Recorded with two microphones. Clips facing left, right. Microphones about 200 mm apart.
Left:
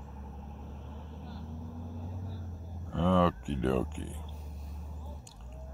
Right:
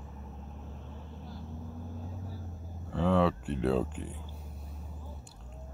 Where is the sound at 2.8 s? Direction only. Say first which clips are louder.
Even; 5° right (ahead or behind).